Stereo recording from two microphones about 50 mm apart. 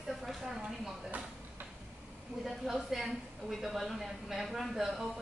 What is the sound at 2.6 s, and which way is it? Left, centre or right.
A woman's voice, centre.